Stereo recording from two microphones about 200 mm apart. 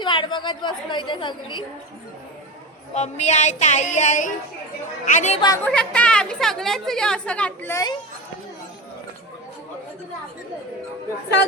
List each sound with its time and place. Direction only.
0.0 s a woman's voice: 25° left (ahead or behind)
2.9 s a sound: 35° left (ahead or behind)
5.6 s a woman's voice: 5° left (ahead or behind)